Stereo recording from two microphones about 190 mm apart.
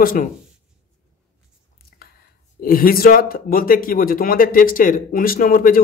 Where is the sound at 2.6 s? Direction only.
50° left (ahead or behind).